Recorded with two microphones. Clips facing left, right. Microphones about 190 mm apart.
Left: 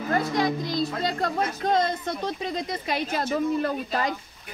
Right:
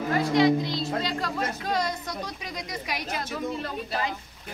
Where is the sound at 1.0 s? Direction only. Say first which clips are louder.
Left 3 dB; 50° left (ahead or behind).